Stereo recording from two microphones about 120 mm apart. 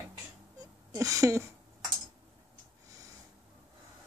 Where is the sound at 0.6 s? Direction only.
30° right (ahead or behind).